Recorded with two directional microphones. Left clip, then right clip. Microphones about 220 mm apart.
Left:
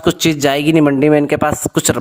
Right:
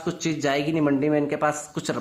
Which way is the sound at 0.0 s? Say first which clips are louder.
Left 12 dB; 45° left (ahead or behind).